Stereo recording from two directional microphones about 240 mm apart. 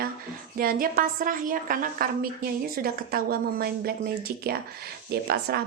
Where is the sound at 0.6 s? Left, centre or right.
Right.